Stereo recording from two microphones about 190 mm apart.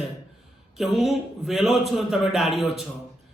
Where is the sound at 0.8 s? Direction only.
Centre (ahead or behind).